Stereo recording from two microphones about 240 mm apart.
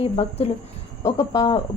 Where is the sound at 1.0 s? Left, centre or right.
Centre.